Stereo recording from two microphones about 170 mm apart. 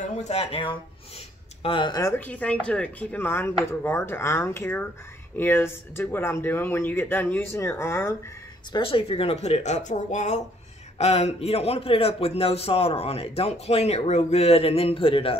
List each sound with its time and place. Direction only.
0.0 s a man's voice: 40° left (ahead or behind); by 8.2 s 15° left (ahead or behind)
8.7 s a man's voice: 30° left (ahead or behind)